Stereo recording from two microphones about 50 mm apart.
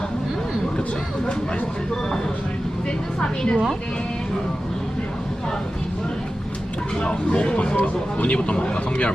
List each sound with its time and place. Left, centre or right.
3.2 s a woman's voice: centre
7.0 s speech: left